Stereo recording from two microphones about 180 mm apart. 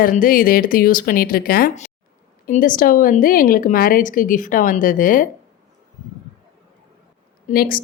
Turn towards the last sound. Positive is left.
turn(degrees=55)  # may be behind; listen again after turning